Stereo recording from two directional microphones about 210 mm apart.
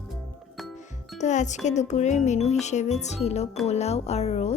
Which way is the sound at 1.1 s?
35° left (ahead or behind).